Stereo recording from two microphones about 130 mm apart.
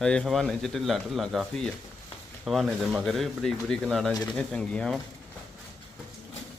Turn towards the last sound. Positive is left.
turn(degrees=5)  # may be behind; listen again after turning